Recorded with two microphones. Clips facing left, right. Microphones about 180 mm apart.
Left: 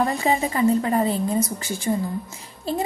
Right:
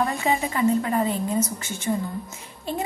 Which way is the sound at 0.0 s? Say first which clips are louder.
Left 2 dB; 35° left (ahead or behind).